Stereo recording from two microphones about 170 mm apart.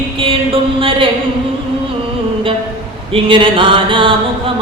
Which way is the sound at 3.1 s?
30° right (ahead or behind).